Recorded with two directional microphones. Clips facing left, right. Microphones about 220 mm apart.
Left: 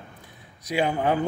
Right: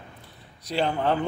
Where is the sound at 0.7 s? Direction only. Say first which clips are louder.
Left 1 dB; 10° left (ahead or behind).